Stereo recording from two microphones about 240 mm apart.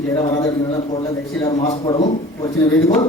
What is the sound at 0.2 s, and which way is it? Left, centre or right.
A man's voice, centre.